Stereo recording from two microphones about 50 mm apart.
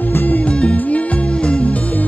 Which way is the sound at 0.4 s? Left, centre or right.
Left.